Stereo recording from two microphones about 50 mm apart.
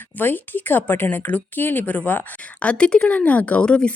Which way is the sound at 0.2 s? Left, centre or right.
Left.